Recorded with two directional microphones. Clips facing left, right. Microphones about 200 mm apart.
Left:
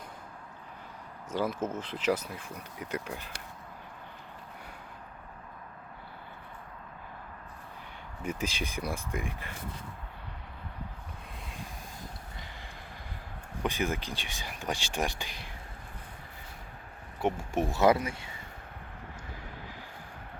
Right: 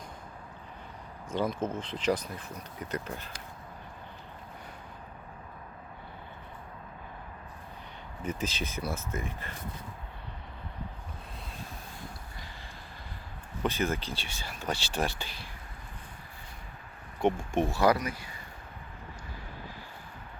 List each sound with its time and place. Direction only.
1.3 s speech: 10° left (ahead or behind)
8.2 s speech: 10° left (ahead or behind)
13.6 s speech: 15° left (ahead or behind)
17.2 s speech: 5° left (ahead or behind)
17.7 s speech: 20° left (ahead or behind)